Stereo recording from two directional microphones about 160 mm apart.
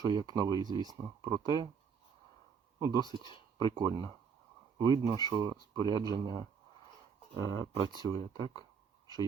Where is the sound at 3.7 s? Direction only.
30° right (ahead or behind).